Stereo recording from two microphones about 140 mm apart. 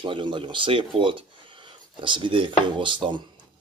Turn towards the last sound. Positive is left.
turn(degrees=-35)  # may be behind; listen again after turning